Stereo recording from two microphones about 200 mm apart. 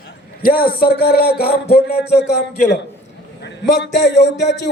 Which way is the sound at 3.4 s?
60° left (ahead or behind).